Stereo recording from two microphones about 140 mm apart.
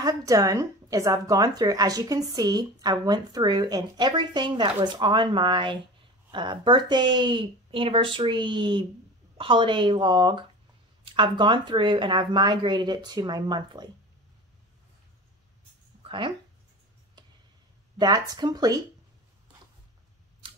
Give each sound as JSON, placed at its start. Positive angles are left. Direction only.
{"t": 0.0, "sound": "a woman's voice", "side_deg": -25}
{"t": 16.0, "sound": "a sound", "side_deg": -35}
{"t": 17.9, "sound": "a woman's voice", "side_deg": -30}